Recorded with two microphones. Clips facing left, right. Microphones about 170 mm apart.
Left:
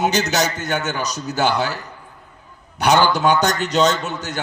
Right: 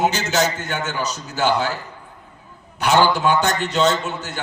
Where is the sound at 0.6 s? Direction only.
40° left (ahead or behind).